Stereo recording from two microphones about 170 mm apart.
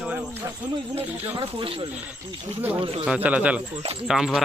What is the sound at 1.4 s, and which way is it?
Speech, 35° right (ahead or behind).